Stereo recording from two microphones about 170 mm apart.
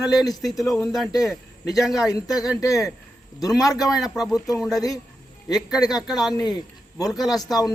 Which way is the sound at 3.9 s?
Centre (ahead or behind).